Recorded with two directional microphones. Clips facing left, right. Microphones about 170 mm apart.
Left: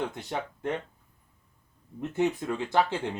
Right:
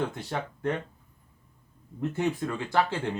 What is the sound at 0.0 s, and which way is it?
Speech, 20° left (ahead or behind).